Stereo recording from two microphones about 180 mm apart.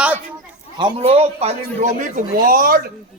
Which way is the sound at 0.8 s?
30° right (ahead or behind).